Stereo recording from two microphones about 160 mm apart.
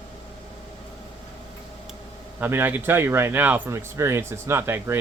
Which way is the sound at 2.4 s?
10° right (ahead or behind).